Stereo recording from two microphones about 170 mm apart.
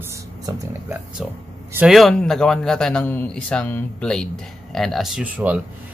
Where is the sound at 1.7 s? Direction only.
Centre (ahead or behind).